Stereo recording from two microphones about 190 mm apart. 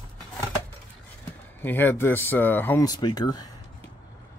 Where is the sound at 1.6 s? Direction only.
10° left (ahead or behind).